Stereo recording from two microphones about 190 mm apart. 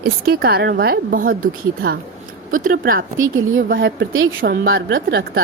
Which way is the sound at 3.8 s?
80° right.